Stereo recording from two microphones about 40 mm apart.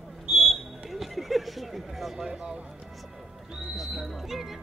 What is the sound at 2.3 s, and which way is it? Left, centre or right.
Speech, centre.